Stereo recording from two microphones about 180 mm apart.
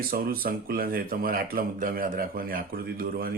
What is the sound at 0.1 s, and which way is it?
Speech, 55° right (ahead or behind).